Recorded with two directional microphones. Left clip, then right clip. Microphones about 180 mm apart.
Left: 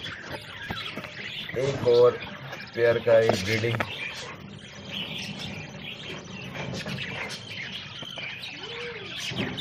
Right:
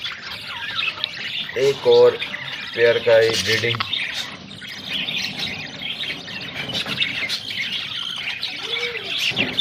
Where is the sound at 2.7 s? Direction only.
25° right (ahead or behind).